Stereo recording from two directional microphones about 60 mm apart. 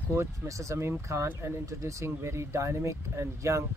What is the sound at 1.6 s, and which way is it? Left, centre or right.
Speech, right.